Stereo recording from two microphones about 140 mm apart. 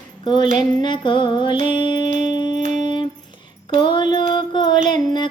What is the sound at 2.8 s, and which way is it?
Music, 35° left (ahead or behind).